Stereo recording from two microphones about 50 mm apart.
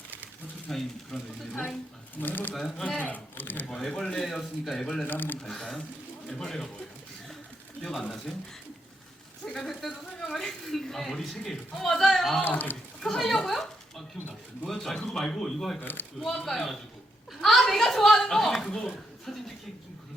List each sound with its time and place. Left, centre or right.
0.7 s speech: centre
2.2 s speech: left
2.6 s speech: centre
3.0 s speech: left
3.7 s speech: centre
5.0 s speech: left
5.4 s speech: centre
7.8 s speech: centre
9.5 s speech: centre
12.5 s speech: left
13.0 s speech: centre
14.7 s speech: centre
15.8 s speech: left
16.2 s speech: centre